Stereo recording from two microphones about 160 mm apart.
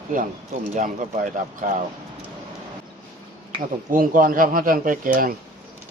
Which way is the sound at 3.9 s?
60° right (ahead or behind).